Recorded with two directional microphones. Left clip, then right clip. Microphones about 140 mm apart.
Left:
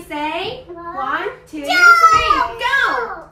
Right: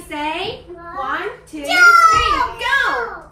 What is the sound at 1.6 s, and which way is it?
Children playing, 30° left (ahead or behind).